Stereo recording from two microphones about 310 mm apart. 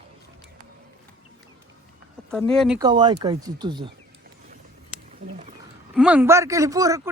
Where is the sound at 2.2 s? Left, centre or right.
Centre.